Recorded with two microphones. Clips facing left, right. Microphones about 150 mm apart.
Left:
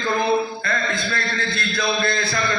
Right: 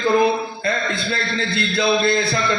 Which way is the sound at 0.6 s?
25° right (ahead or behind).